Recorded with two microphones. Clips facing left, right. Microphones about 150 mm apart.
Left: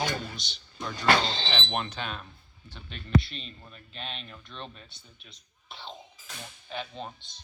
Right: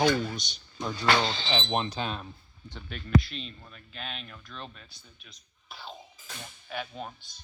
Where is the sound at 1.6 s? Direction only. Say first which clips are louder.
Right 3 dB; 30° right (ahead or behind).